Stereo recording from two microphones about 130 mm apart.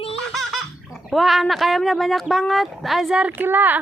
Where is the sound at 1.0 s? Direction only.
Centre (ahead or behind).